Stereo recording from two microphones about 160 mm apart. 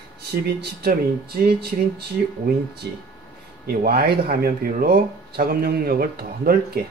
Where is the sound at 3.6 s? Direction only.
75° right (ahead or behind).